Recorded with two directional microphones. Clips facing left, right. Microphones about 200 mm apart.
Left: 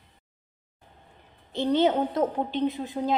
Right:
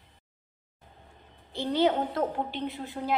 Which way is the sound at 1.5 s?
20° left (ahead or behind).